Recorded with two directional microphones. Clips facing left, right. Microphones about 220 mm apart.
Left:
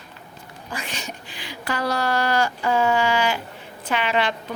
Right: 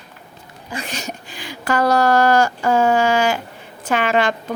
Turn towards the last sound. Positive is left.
turn(degrees=-45)  # may be behind; listen again after turning